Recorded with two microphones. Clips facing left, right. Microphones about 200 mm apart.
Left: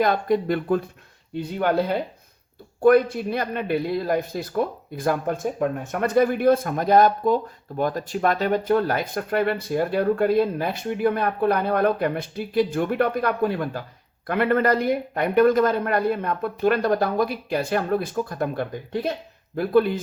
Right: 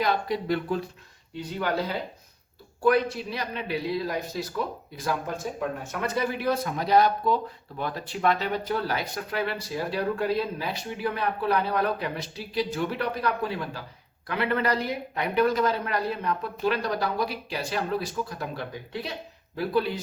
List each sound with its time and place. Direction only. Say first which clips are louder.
0.0 s speech: left 6 dB; 50° left (ahead or behind)